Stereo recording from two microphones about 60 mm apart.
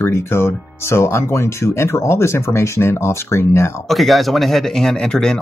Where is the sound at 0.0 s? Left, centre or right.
Left.